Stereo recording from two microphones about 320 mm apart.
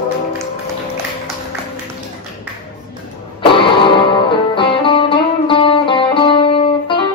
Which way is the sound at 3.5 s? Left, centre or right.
Centre.